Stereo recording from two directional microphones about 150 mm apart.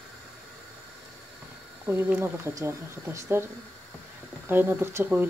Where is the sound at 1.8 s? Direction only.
15° right (ahead or behind).